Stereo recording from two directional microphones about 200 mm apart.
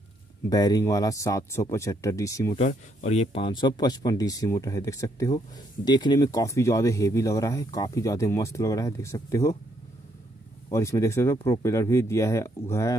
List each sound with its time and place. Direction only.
0.5 s speech: 20° left (ahead or behind)
2.6 s speech: 35° left (ahead or behind); by 9.6 s 15° left (ahead or behind)
10.7 s speech: 15° left (ahead or behind)